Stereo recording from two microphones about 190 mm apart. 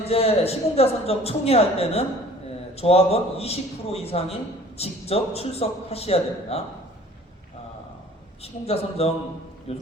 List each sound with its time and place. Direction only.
0.0 s a man's voice: 30° left (ahead or behind)
8.4 s a man's voice: 30° left (ahead or behind)